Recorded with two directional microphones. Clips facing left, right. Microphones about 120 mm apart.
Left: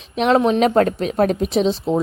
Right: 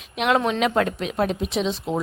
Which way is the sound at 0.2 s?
35° left (ahead or behind).